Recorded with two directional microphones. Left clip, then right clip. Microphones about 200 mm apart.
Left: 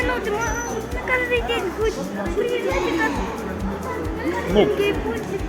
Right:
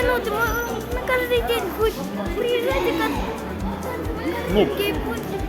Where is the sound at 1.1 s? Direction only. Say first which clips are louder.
Even; 15° right (ahead or behind).